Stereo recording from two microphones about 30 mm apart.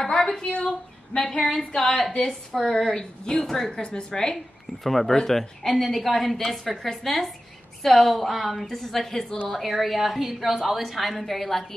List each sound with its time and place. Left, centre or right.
0.2 s a sound: left
0.5 s speech: left
1.1 s a woman's voice: left
1.8 s a woman's voice: centre
3.8 s a woman's voice: left
4.8 s a woman's voice: centre
5.1 s a woman's voice: centre
9.9 s a woman's voice: centre